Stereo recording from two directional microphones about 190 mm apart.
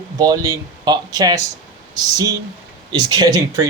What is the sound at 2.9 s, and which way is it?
Speech, 25° right (ahead or behind).